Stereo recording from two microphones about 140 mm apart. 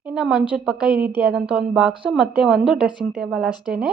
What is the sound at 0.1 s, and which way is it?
A woman's voice, 5° right (ahead or behind).